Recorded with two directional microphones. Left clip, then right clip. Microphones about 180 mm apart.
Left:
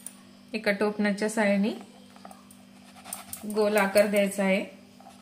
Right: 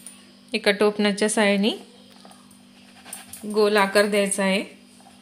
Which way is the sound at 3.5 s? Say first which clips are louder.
Right 4 dB; 40° right (ahead or behind).